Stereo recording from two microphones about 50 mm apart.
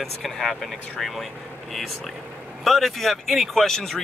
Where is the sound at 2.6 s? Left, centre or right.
Centre.